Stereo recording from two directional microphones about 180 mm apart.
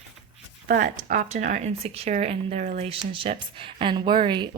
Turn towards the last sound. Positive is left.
turn(degrees=-25)  # may be behind; listen again after turning